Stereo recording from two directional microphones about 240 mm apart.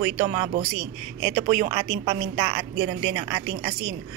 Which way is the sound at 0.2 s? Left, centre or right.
Right.